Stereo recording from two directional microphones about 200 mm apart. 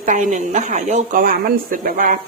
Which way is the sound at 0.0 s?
40° right (ahead or behind).